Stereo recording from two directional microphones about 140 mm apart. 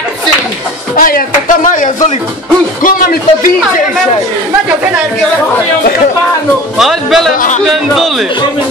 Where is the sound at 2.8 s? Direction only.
80° left.